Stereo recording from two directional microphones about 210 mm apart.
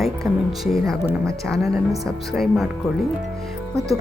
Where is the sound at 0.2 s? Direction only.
Centre (ahead or behind).